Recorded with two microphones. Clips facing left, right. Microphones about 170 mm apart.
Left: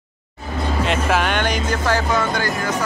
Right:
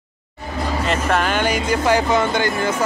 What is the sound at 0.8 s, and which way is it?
Speech, centre (ahead or behind).